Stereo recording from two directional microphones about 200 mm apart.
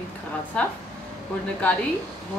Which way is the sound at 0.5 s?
5° left (ahead or behind).